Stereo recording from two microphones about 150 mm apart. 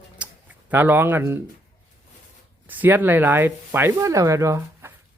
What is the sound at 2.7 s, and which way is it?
Speech, 10° right (ahead or behind).